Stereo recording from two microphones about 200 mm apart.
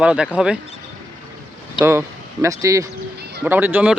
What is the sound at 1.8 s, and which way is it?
Speech, 10° right (ahead or behind).